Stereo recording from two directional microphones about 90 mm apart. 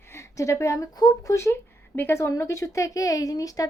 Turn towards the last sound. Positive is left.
turn(degrees=40)  # may be behind; listen again after turning